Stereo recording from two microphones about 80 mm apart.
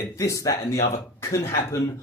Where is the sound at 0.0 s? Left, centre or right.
Left.